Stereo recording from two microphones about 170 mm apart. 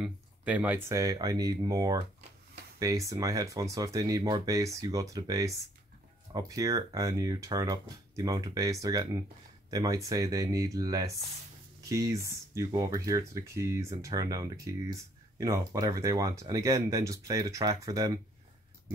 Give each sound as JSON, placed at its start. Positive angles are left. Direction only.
{"t": 0.0, "sound": "speech", "side_deg": -10}